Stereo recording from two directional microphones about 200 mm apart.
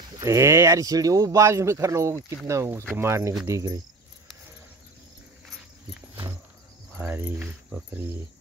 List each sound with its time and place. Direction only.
0.1 s speech: 15° right (ahead or behind)
7.0 s speech: 10° right (ahead or behind)